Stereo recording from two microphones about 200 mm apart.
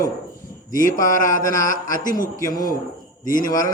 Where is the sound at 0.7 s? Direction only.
40° left (ahead or behind).